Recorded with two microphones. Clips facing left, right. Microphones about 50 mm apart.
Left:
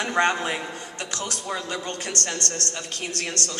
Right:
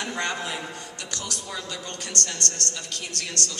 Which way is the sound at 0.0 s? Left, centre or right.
Left.